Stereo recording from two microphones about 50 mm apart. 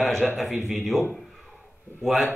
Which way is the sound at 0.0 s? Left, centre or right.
Centre.